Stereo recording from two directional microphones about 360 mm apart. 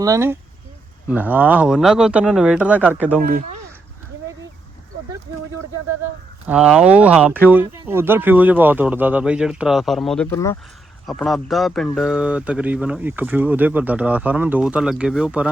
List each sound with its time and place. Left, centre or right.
0.0 s speech: centre
3.2 s speech: right
6.5 s speech: centre